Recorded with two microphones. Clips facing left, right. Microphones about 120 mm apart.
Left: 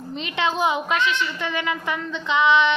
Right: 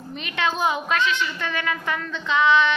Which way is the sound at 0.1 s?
25° left (ahead or behind).